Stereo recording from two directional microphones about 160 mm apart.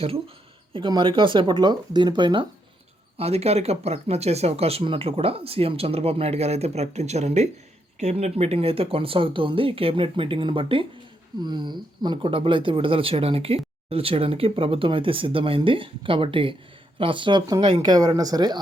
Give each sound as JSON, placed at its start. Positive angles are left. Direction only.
{"t": 0.7, "sound": "speech", "side_deg": -30}